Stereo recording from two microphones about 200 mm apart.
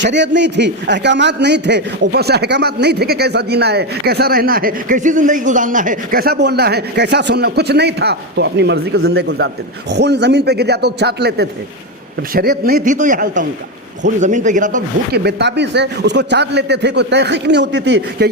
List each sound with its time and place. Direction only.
0.0 s a man's voice: 60° right (ahead or behind)